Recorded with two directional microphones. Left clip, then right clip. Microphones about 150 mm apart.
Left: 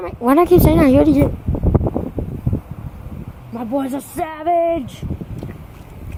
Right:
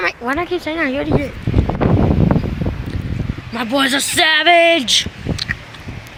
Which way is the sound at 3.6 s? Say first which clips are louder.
Right 7 dB; 10° right (ahead or behind).